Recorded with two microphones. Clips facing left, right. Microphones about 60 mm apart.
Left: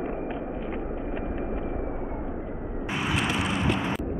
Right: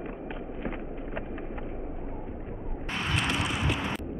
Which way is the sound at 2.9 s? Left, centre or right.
Centre.